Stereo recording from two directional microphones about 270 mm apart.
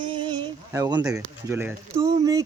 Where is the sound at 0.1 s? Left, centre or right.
Centre.